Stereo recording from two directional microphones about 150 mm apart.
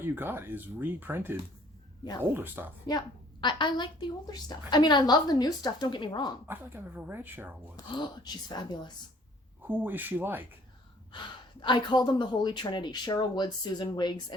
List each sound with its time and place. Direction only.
0.0 s speech: 15° right (ahead or behind)
3.4 s a woman's voice: 30° left (ahead or behind)
6.5 s speech: 15° right (ahead or behind)
7.9 s speech: 30° left (ahead or behind)
9.6 s speech: 15° right (ahead or behind)
11.6 s speech: 30° left (ahead or behind)